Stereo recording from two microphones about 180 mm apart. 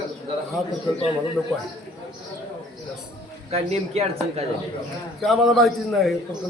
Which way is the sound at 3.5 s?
35° right (ahead or behind).